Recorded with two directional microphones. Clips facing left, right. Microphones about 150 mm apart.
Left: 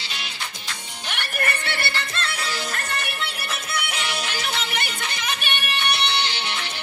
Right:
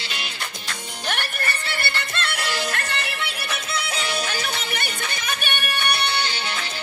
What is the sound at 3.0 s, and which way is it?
Music, 90° right.